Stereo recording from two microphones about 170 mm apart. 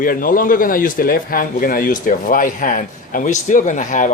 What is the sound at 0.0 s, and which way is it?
A man's voice, 55° left (ahead or behind).